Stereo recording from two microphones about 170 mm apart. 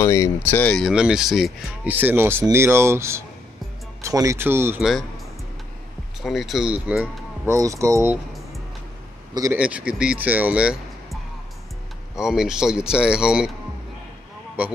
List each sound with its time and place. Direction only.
0.0 s speech: 15° left (ahead or behind); by 4.8 s 15° right (ahead or behind)
6.2 s speech: centre (ahead or behind)
7.4 s speech: 20° right (ahead or behind)
9.3 s a man's voice: 20° right (ahead or behind)
9.6 s speech: 5° right (ahead or behind)
12.2 s speech: 5° right (ahead or behind)
14.6 s speech: 10° right (ahead or behind)